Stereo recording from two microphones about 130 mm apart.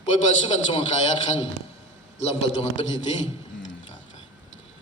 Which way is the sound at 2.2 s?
55° left (ahead or behind).